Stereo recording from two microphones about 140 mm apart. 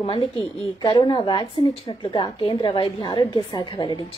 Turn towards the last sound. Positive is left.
turn(degrees=30)  # may be behind; listen again after turning